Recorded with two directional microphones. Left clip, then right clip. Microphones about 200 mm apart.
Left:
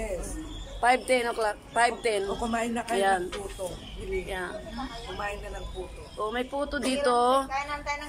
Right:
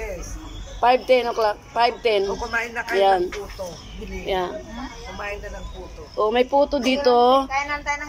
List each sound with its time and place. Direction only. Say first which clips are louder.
0.7 s a woman's voice: right 7 dB; 10° right (ahead or behind)
2.5 s speech: right 5 dB; 15° left (ahead or behind)
3.0 s a woman's voice: right 8 dB; 10° right (ahead or behind)
4.3 s a woman's voice: right 16 dB; 20° right (ahead or behind)
6.1 s a woman's voice: right 12 dB; 20° right (ahead or behind)